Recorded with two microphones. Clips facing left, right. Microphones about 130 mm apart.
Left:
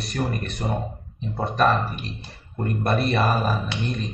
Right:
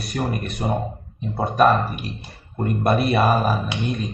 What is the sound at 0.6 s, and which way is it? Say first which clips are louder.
Speech: right 4 dB; 20° right (ahead or behind).